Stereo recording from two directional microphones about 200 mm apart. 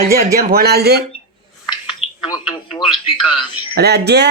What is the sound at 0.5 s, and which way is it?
Speech, 50° right (ahead or behind).